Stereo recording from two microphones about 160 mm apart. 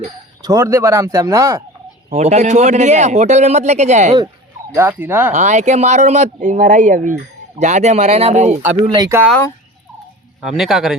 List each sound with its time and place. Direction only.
0.4 s speech: 20° right (ahead or behind)
2.1 s speech: 45° right (ahead or behind)
4.7 s speech: 10° right (ahead or behind)
5.3 s speech: 45° right (ahead or behind)
9.0 s speech: 20° right (ahead or behind)
10.4 s a man's voice: centre (ahead or behind)